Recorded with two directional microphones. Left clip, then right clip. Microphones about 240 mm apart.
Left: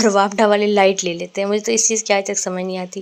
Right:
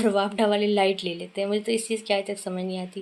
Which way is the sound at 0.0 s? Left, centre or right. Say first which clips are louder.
Left 8 dB; left.